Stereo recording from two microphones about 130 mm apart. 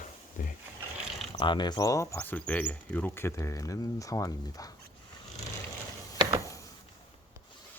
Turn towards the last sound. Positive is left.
turn(degrees=25)  # may be behind; listen again after turning